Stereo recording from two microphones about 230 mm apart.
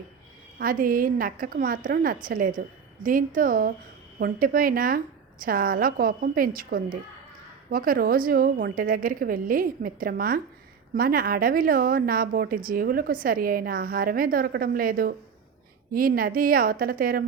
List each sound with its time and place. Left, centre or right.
0.6 s a woman's voice: right